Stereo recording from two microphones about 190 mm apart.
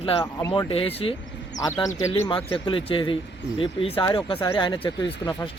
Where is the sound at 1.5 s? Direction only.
20° left (ahead or behind).